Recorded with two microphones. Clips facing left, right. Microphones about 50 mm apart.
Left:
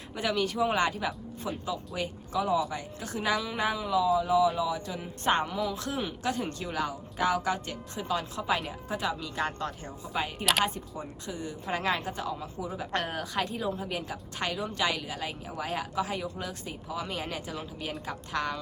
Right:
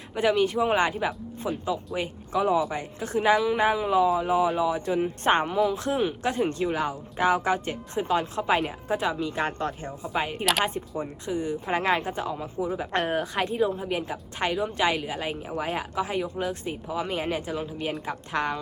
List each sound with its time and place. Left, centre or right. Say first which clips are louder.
0.1 s a woman's voice: right 7 dB; right
2.0 s a woman's voice: right 3 dB; right
3.3 s a woman's voice: right 7 dB; centre
4.2 s a woman's voice: right 2 dB; right
15.5 s speech: right 4 dB; centre
15.8 s a woman's voice: right 3 dB; right